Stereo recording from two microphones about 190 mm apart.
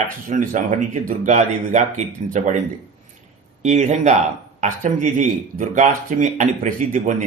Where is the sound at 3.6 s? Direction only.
35° right (ahead or behind).